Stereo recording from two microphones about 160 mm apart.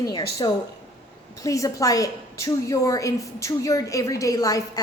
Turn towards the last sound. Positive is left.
turn(degrees=20)  # may be behind; listen again after turning